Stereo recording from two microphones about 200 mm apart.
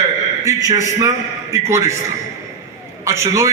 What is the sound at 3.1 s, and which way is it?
Speech, 15° right (ahead or behind).